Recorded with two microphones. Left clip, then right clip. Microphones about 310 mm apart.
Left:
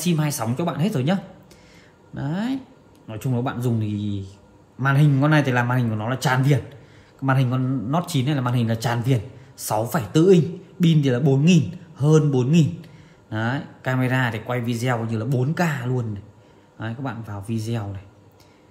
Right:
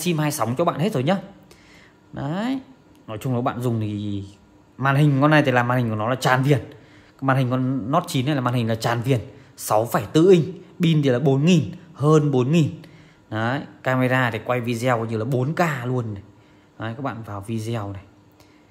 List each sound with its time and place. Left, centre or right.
0.0 s speech: right